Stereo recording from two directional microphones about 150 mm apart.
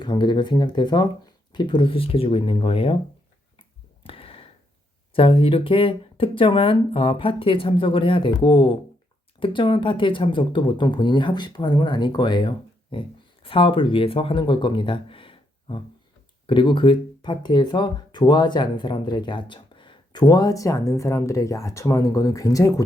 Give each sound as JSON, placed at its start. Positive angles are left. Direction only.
{"t": 0.0, "sound": "speech", "side_deg": 30}
{"t": 4.0, "sound": "a sound", "side_deg": 40}
{"t": 5.1, "sound": "speech", "side_deg": 35}